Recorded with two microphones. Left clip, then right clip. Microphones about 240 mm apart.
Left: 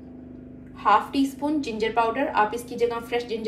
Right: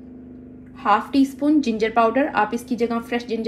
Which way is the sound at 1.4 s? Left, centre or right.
Right.